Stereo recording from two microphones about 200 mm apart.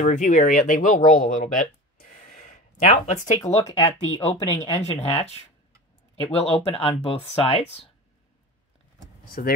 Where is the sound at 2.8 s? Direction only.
35° left (ahead or behind).